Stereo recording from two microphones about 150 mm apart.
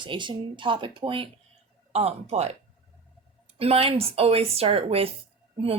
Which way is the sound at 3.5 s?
40° right (ahead or behind).